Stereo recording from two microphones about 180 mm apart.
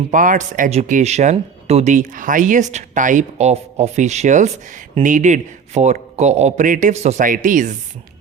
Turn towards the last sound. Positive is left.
turn(degrees=-45)  # may be behind; listen again after turning